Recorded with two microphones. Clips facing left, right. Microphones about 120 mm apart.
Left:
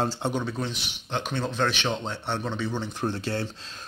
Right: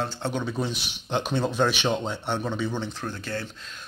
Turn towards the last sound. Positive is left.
turn(degrees=25)  # may be behind; listen again after turning